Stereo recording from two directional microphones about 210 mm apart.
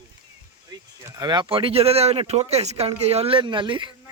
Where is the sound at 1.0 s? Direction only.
20° right (ahead or behind).